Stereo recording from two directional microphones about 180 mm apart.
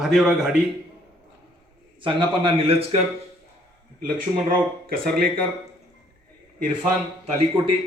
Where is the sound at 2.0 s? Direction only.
30° right (ahead or behind).